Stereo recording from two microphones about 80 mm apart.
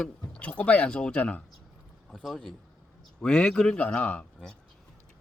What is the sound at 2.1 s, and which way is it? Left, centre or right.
Speech, centre.